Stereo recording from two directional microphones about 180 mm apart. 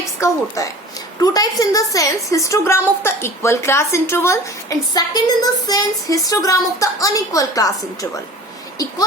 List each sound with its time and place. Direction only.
0.2 s a woman's voice: 20° left (ahead or behind)